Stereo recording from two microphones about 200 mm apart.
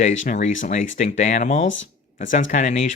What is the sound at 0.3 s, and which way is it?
Speech, 40° left (ahead or behind).